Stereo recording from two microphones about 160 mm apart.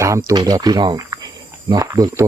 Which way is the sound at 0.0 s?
20° right (ahead or behind).